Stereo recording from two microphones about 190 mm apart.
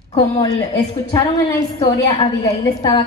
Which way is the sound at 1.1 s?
20° left (ahead or behind).